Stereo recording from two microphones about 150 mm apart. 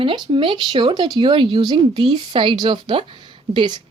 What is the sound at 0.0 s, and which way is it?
A woman's voice, 35° right (ahead or behind).